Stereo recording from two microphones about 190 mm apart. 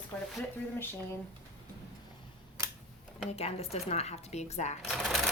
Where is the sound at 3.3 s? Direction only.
30° left (ahead or behind).